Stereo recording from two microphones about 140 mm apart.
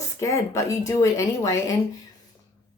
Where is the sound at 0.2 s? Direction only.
20° left (ahead or behind).